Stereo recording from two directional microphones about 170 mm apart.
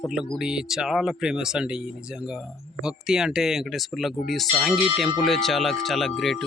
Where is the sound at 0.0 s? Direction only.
Centre (ahead or behind).